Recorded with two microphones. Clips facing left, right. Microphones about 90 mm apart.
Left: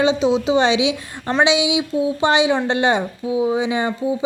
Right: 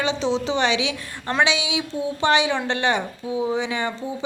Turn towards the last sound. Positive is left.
turn(degrees=20)  # may be behind; listen again after turning